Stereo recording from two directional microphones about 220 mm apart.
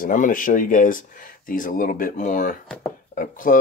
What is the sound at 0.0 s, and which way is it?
Speech, 40° left (ahead or behind).